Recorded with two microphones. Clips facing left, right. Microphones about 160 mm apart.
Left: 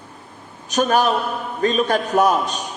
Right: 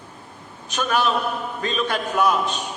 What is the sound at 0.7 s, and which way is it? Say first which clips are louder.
A man's voice: left 4 dB; 40° left (ahead or behind).